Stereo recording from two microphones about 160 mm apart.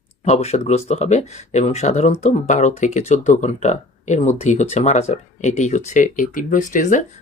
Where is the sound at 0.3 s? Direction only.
45° left (ahead or behind).